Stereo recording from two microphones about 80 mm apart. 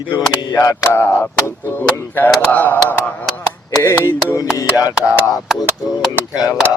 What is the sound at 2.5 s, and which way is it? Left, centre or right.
Speech, left.